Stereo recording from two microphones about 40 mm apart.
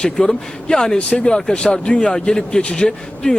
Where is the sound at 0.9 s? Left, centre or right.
Left.